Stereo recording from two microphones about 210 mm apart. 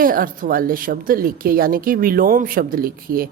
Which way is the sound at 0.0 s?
40° right (ahead or behind).